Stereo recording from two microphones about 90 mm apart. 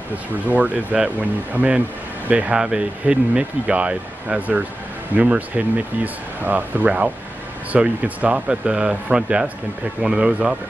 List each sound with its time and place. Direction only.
0.5 s speech: 15° right (ahead or behind)
6.4 s speech: 20° right (ahead or behind)